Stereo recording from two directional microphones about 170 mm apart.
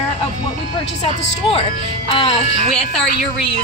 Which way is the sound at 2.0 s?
35° left (ahead or behind).